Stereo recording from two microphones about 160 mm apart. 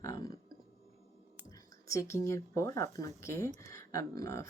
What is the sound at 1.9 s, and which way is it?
Speech, 20° left (ahead or behind).